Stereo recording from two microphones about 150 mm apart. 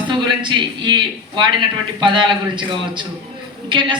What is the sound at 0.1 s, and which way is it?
A man's voice, 30° right (ahead or behind).